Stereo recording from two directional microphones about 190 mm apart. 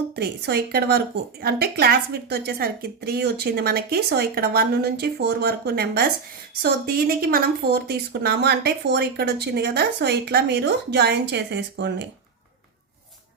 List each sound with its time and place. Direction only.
0.2 s a woman's voice: 60° right (ahead or behind)